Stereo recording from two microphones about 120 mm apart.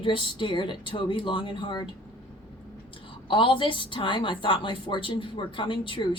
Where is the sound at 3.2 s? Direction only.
45° left (ahead or behind).